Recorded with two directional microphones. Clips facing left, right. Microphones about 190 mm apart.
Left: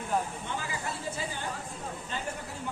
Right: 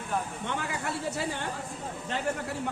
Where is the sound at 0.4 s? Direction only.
65° right (ahead or behind).